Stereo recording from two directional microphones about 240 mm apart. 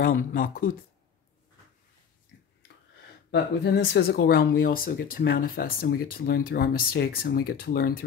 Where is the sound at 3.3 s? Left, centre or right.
Left.